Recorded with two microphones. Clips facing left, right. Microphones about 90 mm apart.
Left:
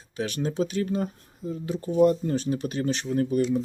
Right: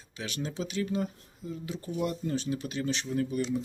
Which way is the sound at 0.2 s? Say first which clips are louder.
Left 8 dB; 45° left (ahead or behind).